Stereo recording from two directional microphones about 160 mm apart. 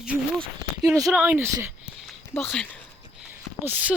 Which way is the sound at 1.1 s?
10° right (ahead or behind).